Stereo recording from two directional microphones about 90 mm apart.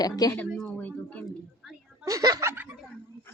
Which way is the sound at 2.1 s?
40° right (ahead or behind).